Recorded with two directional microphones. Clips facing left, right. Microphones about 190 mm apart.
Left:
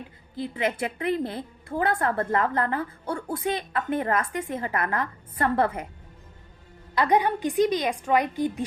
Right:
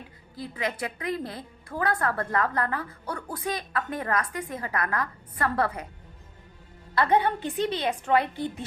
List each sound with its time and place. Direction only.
0.3 s a woman's voice: 25° left (ahead or behind)
6.9 s a woman's voice: 15° left (ahead or behind)